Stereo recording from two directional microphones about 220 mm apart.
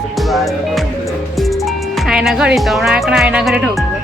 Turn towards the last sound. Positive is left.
turn(degrees=0)  # may be behind; listen again after turning